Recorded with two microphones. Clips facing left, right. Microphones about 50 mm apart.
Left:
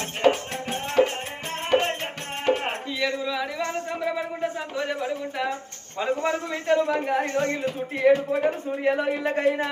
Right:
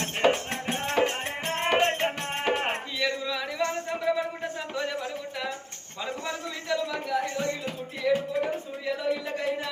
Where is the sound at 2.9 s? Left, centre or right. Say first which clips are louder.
Left 6 dB; centre.